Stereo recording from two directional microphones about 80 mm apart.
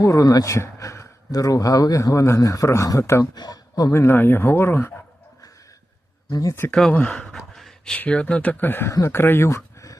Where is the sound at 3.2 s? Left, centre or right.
Left.